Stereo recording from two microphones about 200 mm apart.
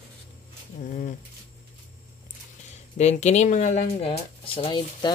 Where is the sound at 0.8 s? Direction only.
40° left (ahead or behind).